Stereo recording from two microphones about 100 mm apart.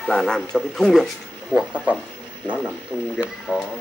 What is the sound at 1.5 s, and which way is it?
Speech, 15° right (ahead or behind).